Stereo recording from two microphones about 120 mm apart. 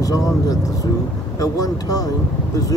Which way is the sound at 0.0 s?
30° left (ahead or behind).